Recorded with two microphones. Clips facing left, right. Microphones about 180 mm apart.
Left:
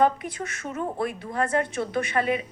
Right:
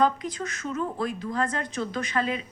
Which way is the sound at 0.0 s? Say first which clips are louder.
Left 2 dB; 60° left (ahead or behind).